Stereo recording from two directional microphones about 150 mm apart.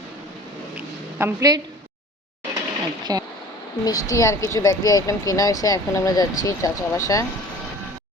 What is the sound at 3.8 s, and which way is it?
Speech, 25° left (ahead or behind).